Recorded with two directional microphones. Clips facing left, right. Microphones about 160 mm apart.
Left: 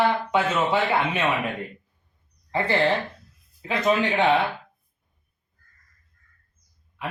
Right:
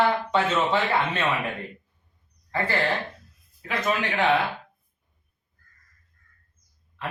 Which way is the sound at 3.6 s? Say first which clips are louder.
Left 4 dB; 20° left (ahead or behind).